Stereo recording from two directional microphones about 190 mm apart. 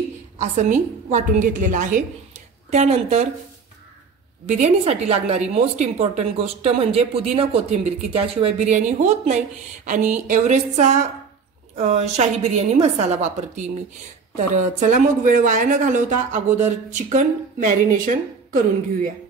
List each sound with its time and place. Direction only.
0.4 s a woman's voice: 40° right (ahead or behind)
4.5 s a woman's voice: 35° right (ahead or behind)